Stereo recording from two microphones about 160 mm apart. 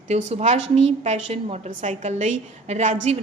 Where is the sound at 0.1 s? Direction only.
45° right (ahead or behind).